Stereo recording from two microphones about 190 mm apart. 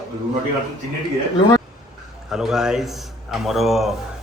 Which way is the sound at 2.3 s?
5° right (ahead or behind).